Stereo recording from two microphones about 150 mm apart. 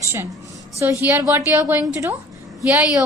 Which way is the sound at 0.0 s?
20° right (ahead or behind).